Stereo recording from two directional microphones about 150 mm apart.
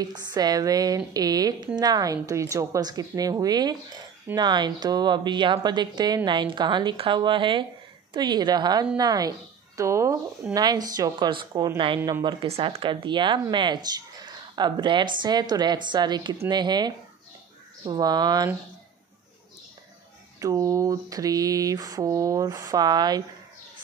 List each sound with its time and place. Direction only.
0.0 s speech: 25° right (ahead or behind)
20.3 s speech: 25° right (ahead or behind)